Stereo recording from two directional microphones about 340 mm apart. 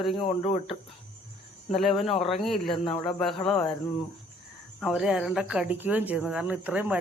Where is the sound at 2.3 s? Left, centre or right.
Centre.